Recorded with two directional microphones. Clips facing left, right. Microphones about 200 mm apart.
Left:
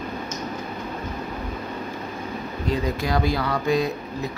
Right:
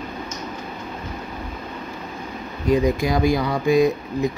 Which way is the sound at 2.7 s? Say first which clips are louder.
Right 6 dB; 15° right (ahead or behind).